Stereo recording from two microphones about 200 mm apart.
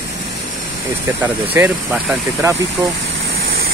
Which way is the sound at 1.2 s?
10° right (ahead or behind).